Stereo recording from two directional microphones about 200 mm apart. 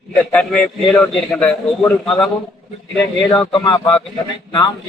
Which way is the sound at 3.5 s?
25° left (ahead or behind).